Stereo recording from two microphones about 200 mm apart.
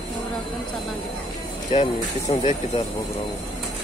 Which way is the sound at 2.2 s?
35° left (ahead or behind).